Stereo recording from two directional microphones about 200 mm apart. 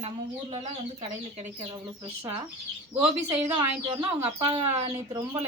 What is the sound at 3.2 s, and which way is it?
Speech, 20° right (ahead or behind).